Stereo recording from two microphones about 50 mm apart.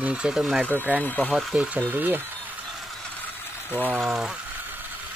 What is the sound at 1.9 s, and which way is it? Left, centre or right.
Speech, right.